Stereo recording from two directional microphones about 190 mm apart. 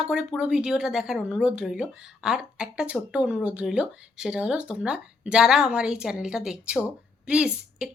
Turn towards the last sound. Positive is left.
turn(degrees=-5)  # may be behind; listen again after turning